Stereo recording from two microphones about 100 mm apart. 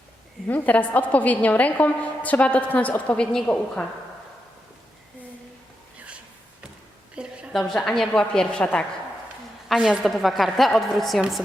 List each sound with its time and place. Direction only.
0.4 s a woman's voice: 15° left (ahead or behind)
7.2 s a sound: 10° right (ahead or behind)
7.5 s a woman's voice: 5° left (ahead or behind)
9.6 s a woman's voice: 5° right (ahead or behind)